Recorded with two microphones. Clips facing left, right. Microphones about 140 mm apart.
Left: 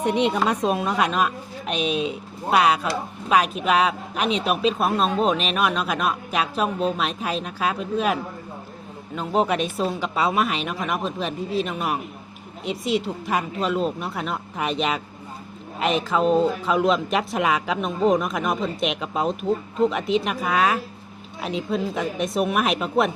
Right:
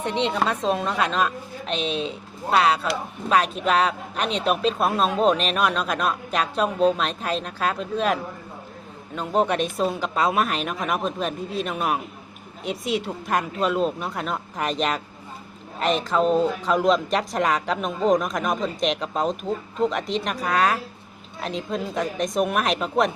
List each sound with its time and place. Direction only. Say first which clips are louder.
0.0 s a woman's voice: left 3 dB; 10° left (ahead or behind)
1.9 s speech: left 3 dB; 30° right (ahead or behind)
2.5 s a woman's voice: left 1 dB; 10° left (ahead or behind)